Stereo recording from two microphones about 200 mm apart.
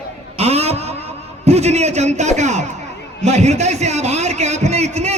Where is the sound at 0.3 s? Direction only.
30° right (ahead or behind).